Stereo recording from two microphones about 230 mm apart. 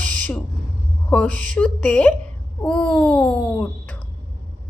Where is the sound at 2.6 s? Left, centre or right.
Centre.